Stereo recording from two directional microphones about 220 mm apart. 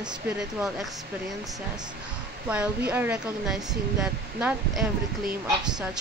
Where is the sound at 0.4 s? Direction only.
Centre (ahead or behind).